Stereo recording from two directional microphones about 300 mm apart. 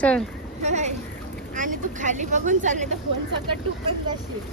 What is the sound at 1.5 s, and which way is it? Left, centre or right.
Vehicle, right.